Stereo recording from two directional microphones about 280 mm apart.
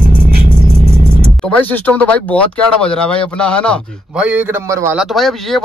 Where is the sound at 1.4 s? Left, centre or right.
Centre.